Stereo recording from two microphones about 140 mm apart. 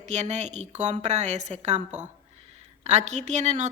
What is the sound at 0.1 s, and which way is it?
A woman's voice, 55° right (ahead or behind).